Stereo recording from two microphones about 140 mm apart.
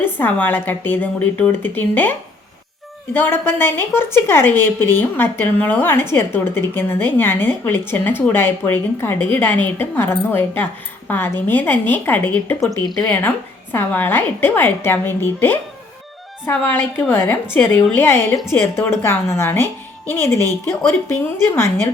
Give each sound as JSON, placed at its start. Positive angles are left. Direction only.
{"t": 0.0, "sound": "a woman's voice", "side_deg": 15}